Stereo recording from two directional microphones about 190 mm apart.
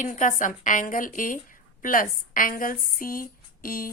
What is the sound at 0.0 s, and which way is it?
A woman's voice, 40° left (ahead or behind).